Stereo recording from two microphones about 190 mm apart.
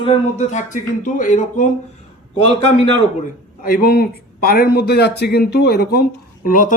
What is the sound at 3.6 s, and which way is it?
A man's voice, 50° left (ahead or behind).